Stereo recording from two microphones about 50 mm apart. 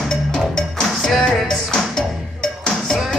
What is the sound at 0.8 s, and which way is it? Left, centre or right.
Music, centre.